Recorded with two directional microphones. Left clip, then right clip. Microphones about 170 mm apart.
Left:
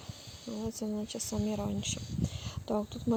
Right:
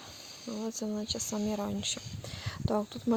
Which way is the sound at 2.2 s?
45° right (ahead or behind).